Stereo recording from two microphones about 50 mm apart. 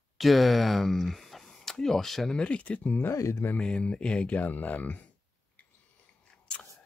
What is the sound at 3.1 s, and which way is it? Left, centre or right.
Speech, left.